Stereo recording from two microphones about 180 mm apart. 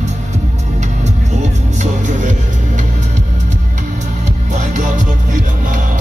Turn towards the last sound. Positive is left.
turn(degrees=-45)  # may be behind; listen again after turning